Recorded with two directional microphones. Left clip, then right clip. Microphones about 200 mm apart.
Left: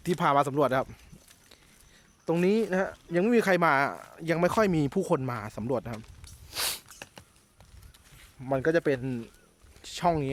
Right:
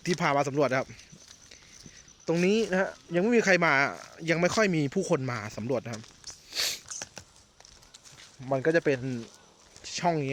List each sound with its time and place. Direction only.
0.2 s speech: 15° left (ahead or behind)
2.2 s speech: 5° left (ahead or behind)
6.2 s a sound: 20° left (ahead or behind)
8.4 s speech: 10° left (ahead or behind)